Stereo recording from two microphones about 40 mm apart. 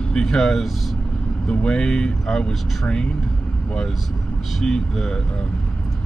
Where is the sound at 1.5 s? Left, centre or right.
Left.